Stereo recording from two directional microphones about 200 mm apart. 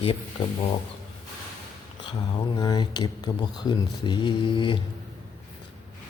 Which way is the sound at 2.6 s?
20° left (ahead or behind).